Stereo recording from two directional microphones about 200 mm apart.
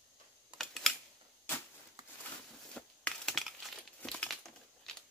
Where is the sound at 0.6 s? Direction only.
Centre (ahead or behind).